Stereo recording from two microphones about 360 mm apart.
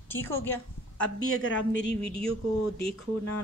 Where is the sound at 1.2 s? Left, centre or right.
Left.